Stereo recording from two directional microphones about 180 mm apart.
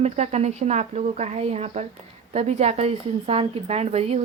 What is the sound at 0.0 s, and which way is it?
Speech, 35° right (ahead or behind).